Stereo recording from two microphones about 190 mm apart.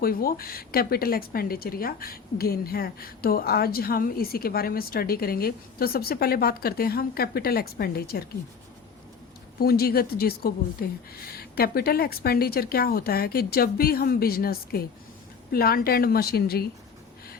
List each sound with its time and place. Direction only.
0.0 s a woman's voice: 50° left (ahead or behind)
9.6 s a woman's voice: 55° left (ahead or behind)